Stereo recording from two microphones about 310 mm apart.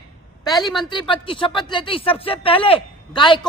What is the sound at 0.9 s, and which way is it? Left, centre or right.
Speech, centre.